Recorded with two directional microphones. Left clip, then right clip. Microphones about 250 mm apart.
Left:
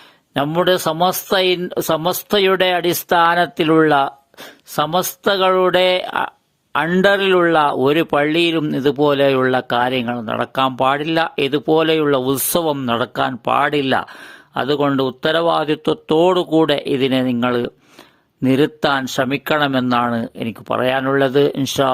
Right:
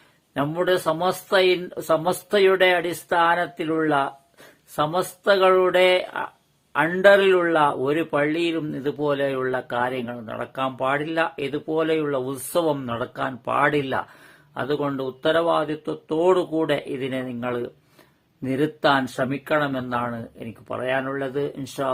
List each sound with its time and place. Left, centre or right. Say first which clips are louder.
0.3 s a man's voice: left 6 dB; left